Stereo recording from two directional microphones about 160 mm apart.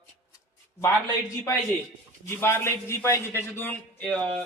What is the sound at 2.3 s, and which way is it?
Speech, 15° left (ahead or behind).